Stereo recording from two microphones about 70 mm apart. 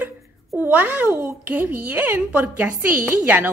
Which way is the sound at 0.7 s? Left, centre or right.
Right.